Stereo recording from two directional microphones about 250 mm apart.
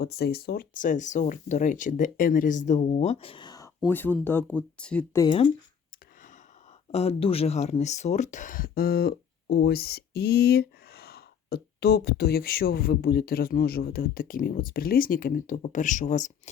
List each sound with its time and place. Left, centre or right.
0.0 s speech: left; by 5.5 s centre
6.9 s speech: left